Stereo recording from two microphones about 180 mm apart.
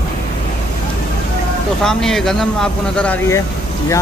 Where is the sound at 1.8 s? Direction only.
5° left (ahead or behind).